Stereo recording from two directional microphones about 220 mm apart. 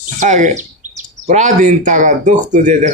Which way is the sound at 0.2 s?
35° right (ahead or behind).